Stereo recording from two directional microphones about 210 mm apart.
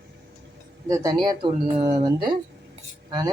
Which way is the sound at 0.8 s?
15° right (ahead or behind).